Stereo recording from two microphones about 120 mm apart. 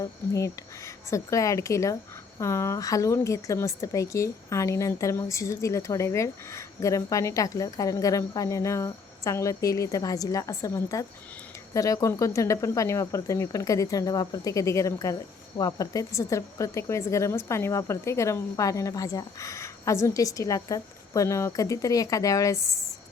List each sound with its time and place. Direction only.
0.0 s a woman's voice: 25° left (ahead or behind)